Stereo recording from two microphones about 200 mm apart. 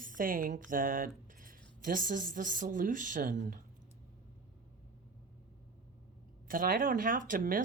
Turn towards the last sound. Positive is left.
turn(degrees=-45)  # may be behind; listen again after turning